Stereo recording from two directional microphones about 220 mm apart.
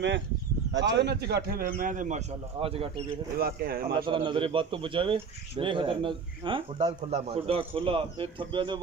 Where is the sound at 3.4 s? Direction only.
45° right (ahead or behind).